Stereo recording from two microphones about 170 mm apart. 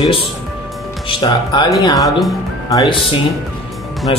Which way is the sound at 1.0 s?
25° left (ahead or behind).